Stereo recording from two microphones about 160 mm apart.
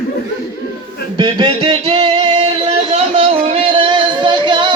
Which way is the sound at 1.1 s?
30° right (ahead or behind).